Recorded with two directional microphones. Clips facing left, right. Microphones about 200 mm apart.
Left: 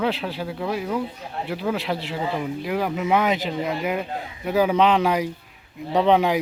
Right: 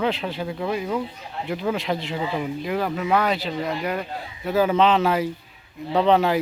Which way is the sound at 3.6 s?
5° left (ahead or behind).